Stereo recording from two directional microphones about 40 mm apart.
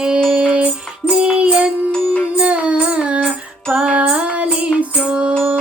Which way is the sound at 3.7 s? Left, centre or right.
Right.